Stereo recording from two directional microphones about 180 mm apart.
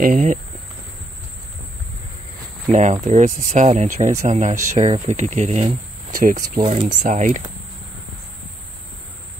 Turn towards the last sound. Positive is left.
turn(degrees=-45)  # may be behind; listen again after turning